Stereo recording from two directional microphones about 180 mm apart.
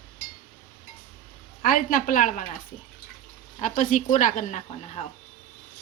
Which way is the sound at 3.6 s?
45° left (ahead or behind).